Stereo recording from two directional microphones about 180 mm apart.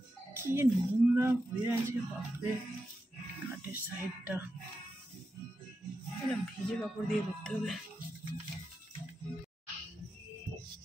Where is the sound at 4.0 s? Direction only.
10° right (ahead or behind).